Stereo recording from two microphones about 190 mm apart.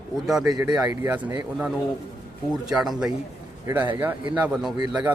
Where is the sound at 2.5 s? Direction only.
Centre (ahead or behind).